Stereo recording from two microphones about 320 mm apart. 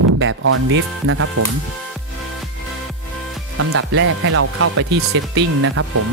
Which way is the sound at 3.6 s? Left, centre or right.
Right.